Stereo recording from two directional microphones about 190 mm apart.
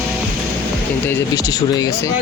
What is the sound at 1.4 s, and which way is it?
Speech, 20° left (ahead or behind).